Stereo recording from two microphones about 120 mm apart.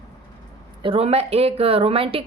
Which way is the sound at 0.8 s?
50° right (ahead or behind).